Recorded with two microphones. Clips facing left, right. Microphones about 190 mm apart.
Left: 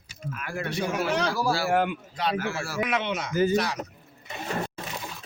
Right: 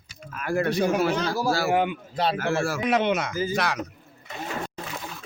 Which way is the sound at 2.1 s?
30° right (ahead or behind).